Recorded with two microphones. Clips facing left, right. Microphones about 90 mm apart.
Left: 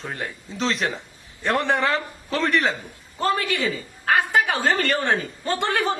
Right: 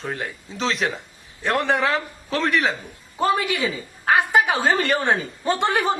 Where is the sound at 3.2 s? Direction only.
15° right (ahead or behind).